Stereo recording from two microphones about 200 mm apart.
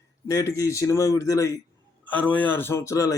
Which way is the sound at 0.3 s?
15° left (ahead or behind).